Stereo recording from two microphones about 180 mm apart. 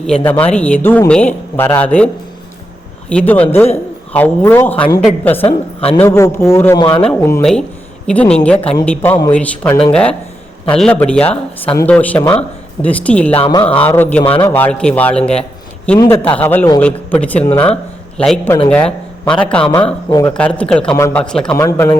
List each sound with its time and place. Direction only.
0.5 s speech: 10° left (ahead or behind)
3.1 s speech: 10° left (ahead or behind)
5.5 s a woman's voice: 35° left (ahead or behind)
6.0 s speech: 15° left (ahead or behind)
6.7 s speech: 25° left (ahead or behind)
7.1 s speech: 15° left (ahead or behind)
13.3 s speech: 25° left (ahead or behind)
13.7 s speech: 10° left (ahead or behind)
19.7 s speech: 20° left (ahead or behind)
20.3 s speech: 5° left (ahead or behind)
21.5 s speech: 20° left (ahead or behind)